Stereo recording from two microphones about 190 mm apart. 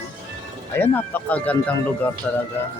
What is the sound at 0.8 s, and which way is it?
Speech, 10° left (ahead or behind).